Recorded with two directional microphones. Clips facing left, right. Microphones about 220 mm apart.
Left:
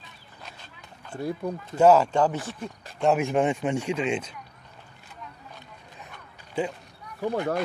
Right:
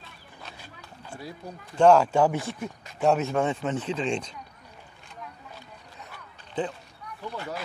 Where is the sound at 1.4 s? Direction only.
55° left (ahead or behind).